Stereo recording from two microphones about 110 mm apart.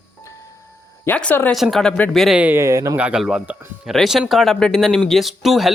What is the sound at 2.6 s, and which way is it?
Speech, 30° right (ahead or behind).